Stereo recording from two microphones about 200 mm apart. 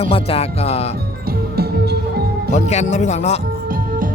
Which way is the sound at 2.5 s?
35° left (ahead or behind).